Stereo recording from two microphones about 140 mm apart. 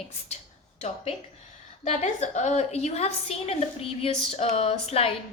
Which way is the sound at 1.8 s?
55° left (ahead or behind).